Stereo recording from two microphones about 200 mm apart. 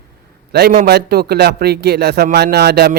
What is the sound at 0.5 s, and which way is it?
A man's voice, 50° right (ahead or behind).